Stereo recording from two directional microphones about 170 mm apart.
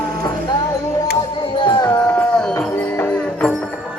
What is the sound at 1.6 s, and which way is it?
Music, 20° left (ahead or behind).